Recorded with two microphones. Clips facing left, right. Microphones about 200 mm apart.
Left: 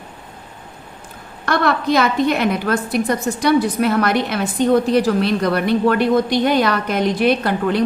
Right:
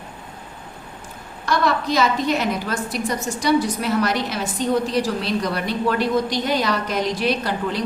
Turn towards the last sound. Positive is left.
turn(degrees=55)  # may be behind; listen again after turning